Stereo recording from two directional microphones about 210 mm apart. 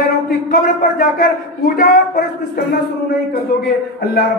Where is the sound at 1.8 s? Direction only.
45° left (ahead or behind).